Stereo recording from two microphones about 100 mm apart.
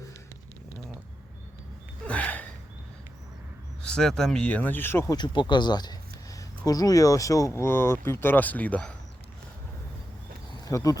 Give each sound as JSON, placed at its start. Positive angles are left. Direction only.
{"t": 2.0, "sound": "a sound", "side_deg": 15}
{"t": 3.8, "sound": "speech", "side_deg": 5}
{"t": 5.0, "sound": "speech", "side_deg": 45}
{"t": 10.6, "sound": "speech", "side_deg": 35}